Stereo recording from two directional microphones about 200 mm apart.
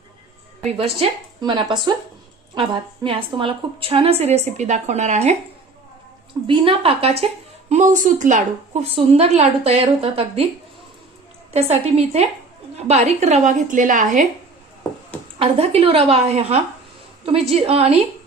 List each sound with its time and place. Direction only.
0.8 s a woman's voice: 30° right (ahead or behind)
6.5 s a woman's voice: 25° right (ahead or behind)
11.5 s a woman's voice: 35° right (ahead or behind)
15.4 s a woman's voice: 30° right (ahead or behind)